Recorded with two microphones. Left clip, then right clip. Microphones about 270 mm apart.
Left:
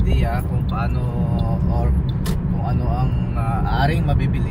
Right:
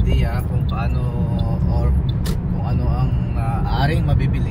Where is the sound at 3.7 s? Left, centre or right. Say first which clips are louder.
Left 1 dB; left.